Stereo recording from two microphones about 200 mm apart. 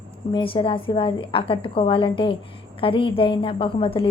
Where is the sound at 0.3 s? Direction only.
25° left (ahead or behind).